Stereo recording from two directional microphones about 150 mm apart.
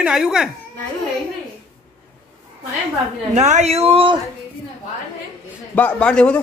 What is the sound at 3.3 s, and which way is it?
Speech, 45° right (ahead or behind).